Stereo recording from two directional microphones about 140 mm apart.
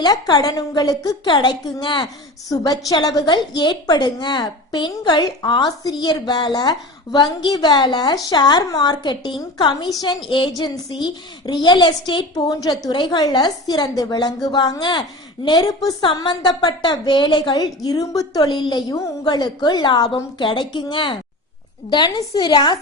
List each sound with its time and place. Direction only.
0.0 s a woman's voice: 30° left (ahead or behind)